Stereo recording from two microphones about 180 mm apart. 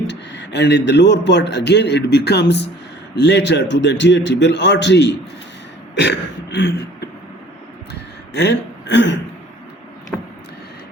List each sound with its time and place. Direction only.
0.1 s a man's voice: 70° left (ahead or behind)
6.0 s throat clearing: 75° left (ahead or behind)
8.4 s speech: 75° left (ahead or behind)